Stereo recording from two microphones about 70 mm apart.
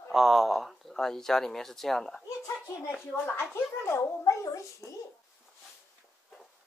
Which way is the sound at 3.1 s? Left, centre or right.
Left.